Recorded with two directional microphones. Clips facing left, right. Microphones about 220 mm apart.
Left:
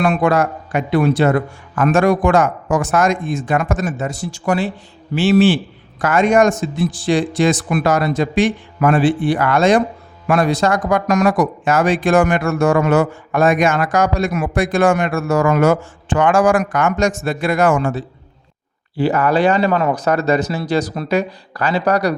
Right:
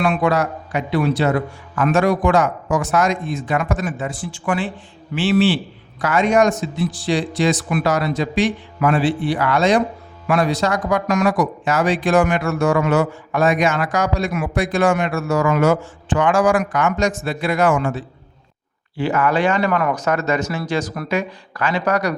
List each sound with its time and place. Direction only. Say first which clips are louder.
0.0 s speech: left 3 dB; 45° left (ahead or behind)